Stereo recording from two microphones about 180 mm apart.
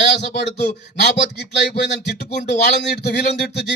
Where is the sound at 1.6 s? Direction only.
70° left (ahead or behind).